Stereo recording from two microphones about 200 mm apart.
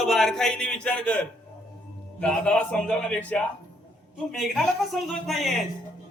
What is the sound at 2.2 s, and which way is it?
A man's voice, 5° left (ahead or behind).